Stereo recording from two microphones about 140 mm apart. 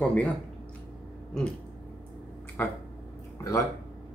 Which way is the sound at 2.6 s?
15° left (ahead or behind).